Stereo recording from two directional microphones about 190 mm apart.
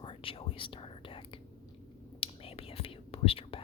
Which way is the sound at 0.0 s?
30° left (ahead or behind).